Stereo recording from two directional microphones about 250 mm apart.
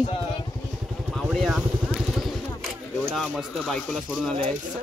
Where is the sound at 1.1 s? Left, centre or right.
Centre.